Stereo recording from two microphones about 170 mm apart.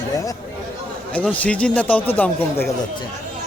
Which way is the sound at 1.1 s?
10° left (ahead or behind).